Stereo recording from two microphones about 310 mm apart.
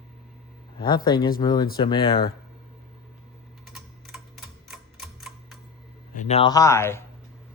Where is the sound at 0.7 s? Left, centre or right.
Centre.